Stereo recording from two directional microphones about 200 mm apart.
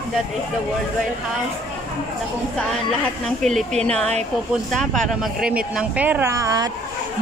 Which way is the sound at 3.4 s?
5° left (ahead or behind).